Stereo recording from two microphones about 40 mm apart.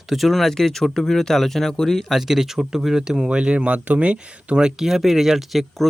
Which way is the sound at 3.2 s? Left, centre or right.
Right.